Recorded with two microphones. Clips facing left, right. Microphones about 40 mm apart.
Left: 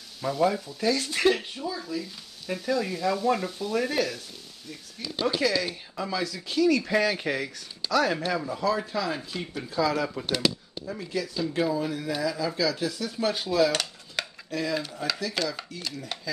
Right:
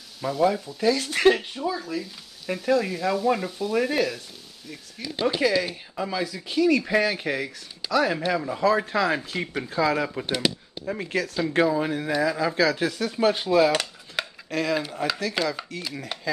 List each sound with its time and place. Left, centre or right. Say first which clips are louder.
0.2 s speech: right 2 dB; centre
0.9 s speech: right 4 dB; right
2.0 s speech: right 2 dB; centre
3.7 s speech: right 3 dB; centre
8.8 s speech: right 6 dB; right
9.6 s speech: right 2 dB; right
10.0 s speech: right 1 dB; right
11.0 s speech: right 3 dB; right
11.7 s speech: right 4 dB; right
13.1 s speech: right 8 dB; right
13.7 s cutlery: right 4 dB; centre
14.5 s speech: right 4 dB; right
15.4 s speech: right 3 dB; centre